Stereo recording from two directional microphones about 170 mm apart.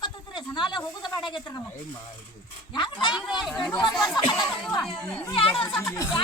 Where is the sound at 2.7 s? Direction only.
25° left (ahead or behind).